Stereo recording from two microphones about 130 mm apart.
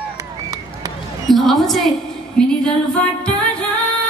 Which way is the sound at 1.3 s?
Centre (ahead or behind).